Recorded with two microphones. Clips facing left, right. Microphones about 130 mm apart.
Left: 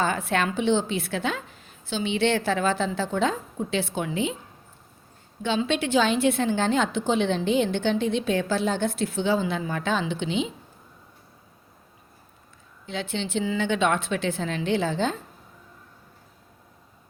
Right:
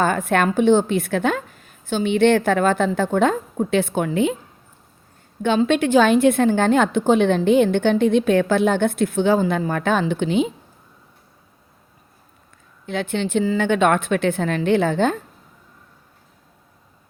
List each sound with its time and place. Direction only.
0.0 s a woman's voice: 50° right (ahead or behind)
5.4 s a woman's voice: 50° right (ahead or behind)
12.8 s a woman's voice: 55° right (ahead or behind)